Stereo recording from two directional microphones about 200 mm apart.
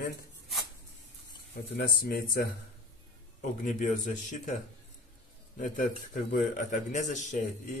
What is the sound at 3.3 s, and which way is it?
Speech, 40° left (ahead or behind).